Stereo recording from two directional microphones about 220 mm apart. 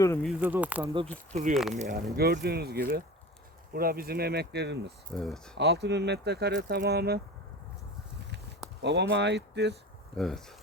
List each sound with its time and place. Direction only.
0.0 s speech: 10° left (ahead or behind)
0.3 s speech: 5° right (ahead or behind)
1.3 s speech: 35° right (ahead or behind)
2.1 s speech: 45° right (ahead or behind)
5.1 s speech: centre (ahead or behind)
5.5 s speech: 50° right (ahead or behind)
8.8 s speech: 50° right (ahead or behind)
10.2 s speech: centre (ahead or behind)